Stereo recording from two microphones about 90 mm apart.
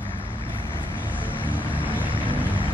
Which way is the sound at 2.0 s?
75° right (ahead or behind).